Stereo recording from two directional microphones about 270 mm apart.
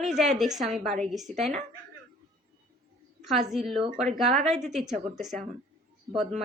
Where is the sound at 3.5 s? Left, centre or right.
Centre.